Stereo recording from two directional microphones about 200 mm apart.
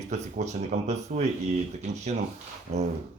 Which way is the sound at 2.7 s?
35° right (ahead or behind).